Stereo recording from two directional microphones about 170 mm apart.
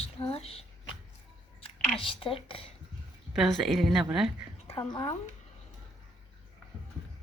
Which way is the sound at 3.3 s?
Centre (ahead or behind).